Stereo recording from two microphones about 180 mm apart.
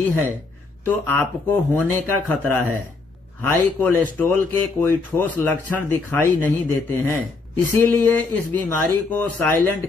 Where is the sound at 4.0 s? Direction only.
10° left (ahead or behind).